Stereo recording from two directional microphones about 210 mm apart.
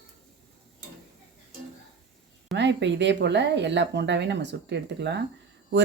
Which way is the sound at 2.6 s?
55° right (ahead or behind).